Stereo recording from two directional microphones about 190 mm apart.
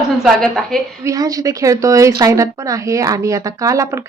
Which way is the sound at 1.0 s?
20° right (ahead or behind).